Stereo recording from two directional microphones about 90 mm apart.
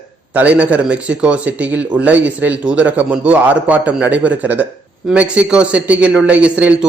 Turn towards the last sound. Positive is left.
turn(degrees=-15)  # may be behind; listen again after turning